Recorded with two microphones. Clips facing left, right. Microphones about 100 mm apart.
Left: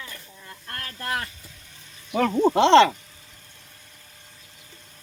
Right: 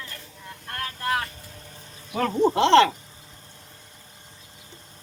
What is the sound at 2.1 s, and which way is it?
Speech, 5° left (ahead or behind).